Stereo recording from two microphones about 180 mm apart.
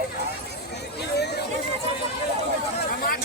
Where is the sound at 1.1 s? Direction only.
65° left (ahead or behind).